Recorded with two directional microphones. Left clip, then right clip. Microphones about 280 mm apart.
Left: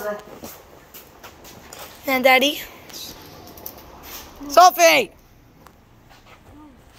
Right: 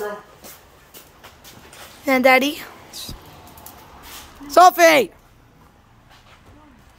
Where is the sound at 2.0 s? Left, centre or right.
Centre.